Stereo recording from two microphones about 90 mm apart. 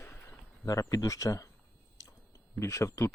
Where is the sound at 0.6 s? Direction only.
40° left (ahead or behind).